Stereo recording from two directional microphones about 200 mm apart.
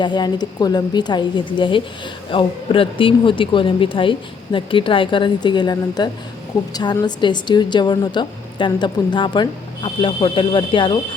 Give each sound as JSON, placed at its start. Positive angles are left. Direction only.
{"t": 0.0, "sound": "a woman's voice", "side_deg": 20}